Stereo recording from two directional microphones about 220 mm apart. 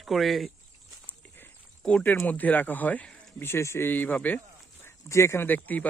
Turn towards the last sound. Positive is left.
turn(degrees=5)  # may be behind; listen again after turning